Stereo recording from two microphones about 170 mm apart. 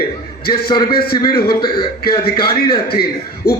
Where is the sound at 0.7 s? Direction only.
25° left (ahead or behind).